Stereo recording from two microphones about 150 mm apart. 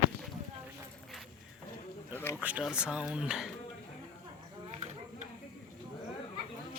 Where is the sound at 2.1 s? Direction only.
15° left (ahead or behind).